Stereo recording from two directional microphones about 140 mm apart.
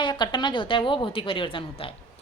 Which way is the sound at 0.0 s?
35° left (ahead or behind).